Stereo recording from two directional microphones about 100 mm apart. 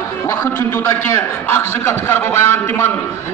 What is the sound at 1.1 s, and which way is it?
A man's voice, 25° left (ahead or behind).